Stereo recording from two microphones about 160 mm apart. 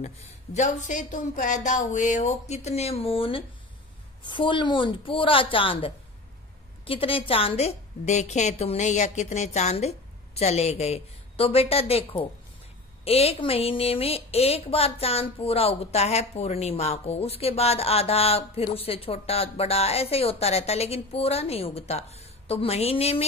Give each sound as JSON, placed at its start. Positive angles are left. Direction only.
{"t": 0.0, "sound": "a woman's voice", "side_deg": 50}